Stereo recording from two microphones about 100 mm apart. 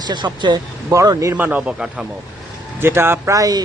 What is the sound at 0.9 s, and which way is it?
Speech, 35° right (ahead or behind).